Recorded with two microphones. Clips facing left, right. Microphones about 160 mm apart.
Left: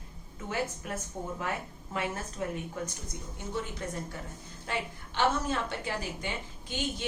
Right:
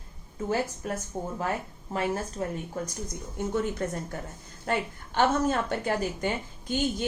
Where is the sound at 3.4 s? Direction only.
45° right (ahead or behind).